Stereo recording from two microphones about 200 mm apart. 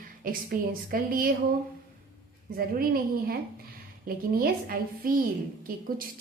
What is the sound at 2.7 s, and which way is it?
Speech, 45° right (ahead or behind).